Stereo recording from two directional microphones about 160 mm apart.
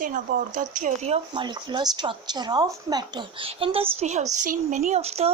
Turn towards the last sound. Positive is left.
turn(degrees=-40)  # may be behind; listen again after turning